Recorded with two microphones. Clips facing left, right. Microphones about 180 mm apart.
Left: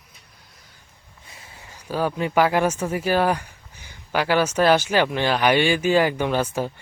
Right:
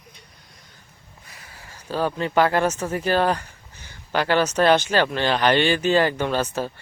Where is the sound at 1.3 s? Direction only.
25° left (ahead or behind).